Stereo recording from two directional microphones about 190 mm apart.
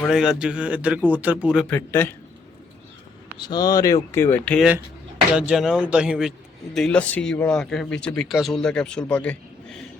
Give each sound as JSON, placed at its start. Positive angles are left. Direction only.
{"t": 0.0, "sound": "speech", "side_deg": 0}
{"t": 1.7, "sound": "speech", "side_deg": 10}
{"t": 3.3, "sound": "speech", "side_deg": 20}
{"t": 5.3, "sound": "speech", "side_deg": -5}